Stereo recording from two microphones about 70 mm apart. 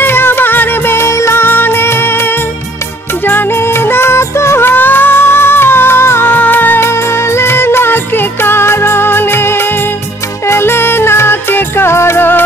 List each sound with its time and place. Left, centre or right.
0.0 s music: left
3.3 s music: left
10.5 s music: left